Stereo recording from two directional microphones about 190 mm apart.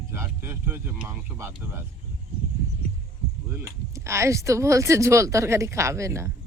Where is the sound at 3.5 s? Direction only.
15° right (ahead or behind).